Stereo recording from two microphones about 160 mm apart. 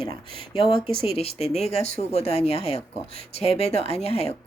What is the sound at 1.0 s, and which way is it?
A woman's voice, 40° left (ahead or behind).